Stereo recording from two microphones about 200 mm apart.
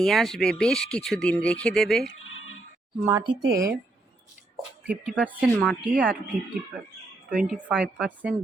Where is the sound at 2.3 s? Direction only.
80° left.